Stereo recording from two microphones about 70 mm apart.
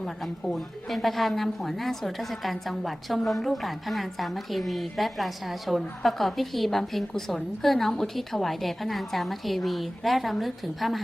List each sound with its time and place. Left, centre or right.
0.0 s a woman's voice: centre